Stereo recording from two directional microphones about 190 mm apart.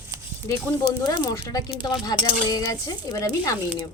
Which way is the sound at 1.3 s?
20° left (ahead or behind).